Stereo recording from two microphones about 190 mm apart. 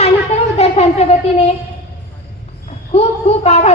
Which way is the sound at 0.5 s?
35° left (ahead or behind).